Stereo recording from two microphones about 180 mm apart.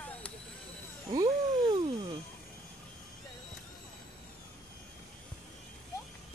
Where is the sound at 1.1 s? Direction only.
20° right (ahead or behind).